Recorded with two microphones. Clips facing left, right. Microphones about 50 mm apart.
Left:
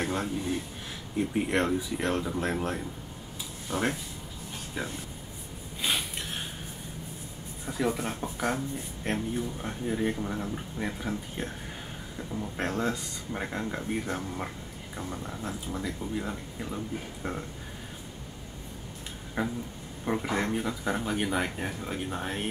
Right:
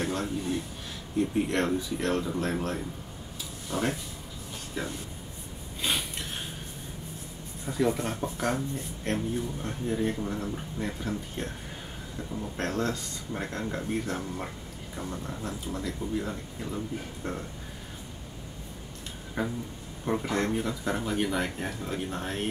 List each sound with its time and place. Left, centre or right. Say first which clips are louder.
0.0 s a sound: even; centre
1.1 s speech: right 1 dB; centre
3.7 s speech: even; left
4.7 s speech: right 1 dB; centre
5.8 s a sound: even; centre
7.6 s speech: right 2 dB; centre
19.4 s speech: even; centre